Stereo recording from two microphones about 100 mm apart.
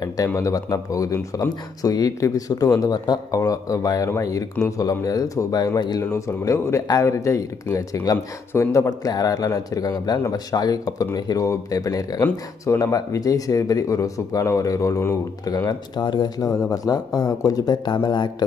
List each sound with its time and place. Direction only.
0.4 s speech: 35° left (ahead or behind)
6.1 s speech: 30° left (ahead or behind)
16.0 s speech: 45° left (ahead or behind)